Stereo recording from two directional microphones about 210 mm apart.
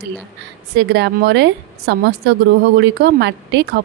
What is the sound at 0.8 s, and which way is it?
A woman's voice, 55° right (ahead or behind).